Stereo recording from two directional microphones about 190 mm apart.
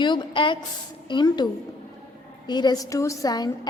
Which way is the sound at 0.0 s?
25° left (ahead or behind).